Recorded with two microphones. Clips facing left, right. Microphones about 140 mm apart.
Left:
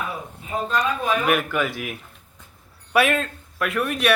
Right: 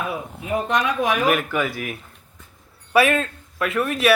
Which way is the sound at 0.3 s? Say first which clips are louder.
Right 2 dB; 85° right.